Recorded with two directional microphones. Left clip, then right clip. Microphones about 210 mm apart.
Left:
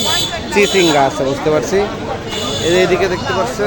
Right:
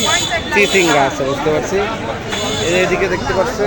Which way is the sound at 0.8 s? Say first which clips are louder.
Left 1 dB; 10° left (ahead or behind).